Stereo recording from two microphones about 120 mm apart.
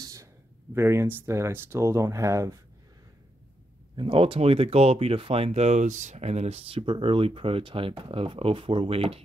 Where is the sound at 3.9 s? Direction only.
50° right (ahead or behind).